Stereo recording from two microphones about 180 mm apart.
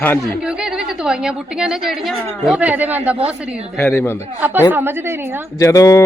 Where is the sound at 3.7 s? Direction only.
10° left (ahead or behind).